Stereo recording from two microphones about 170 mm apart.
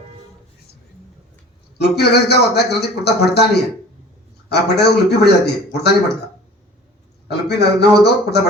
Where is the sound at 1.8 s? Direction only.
75° left (ahead or behind).